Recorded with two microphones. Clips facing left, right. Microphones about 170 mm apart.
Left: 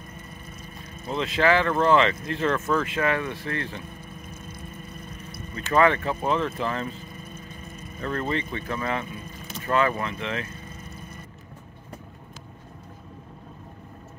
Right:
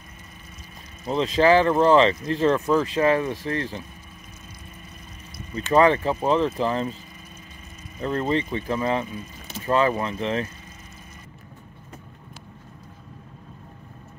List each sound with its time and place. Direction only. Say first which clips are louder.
1.1 s speech: right 4 dB; 35° right (ahead or behind)
5.6 s speech: right 3 dB; 30° right (ahead or behind)
8.0 s speech: right 4 dB; 30° right (ahead or behind)